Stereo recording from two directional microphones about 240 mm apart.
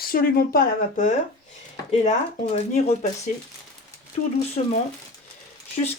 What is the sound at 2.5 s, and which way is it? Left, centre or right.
Speech, left.